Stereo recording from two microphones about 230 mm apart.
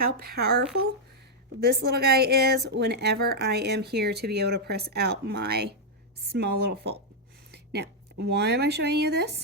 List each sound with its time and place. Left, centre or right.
0.0 s a woman's voice: right
1.6 s a woman's voice: right